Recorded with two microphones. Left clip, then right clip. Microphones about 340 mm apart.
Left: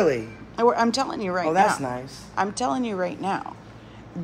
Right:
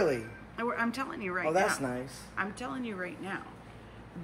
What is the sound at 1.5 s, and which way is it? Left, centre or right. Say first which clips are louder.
Speech: left 8 dB; left.